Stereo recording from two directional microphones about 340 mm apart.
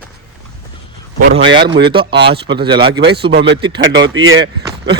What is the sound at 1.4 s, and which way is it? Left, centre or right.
Speech, right.